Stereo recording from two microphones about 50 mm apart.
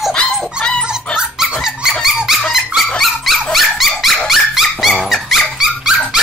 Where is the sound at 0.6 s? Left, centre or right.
Centre.